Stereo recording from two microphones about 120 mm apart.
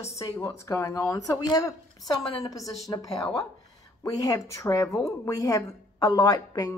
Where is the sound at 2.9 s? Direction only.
30° left (ahead or behind).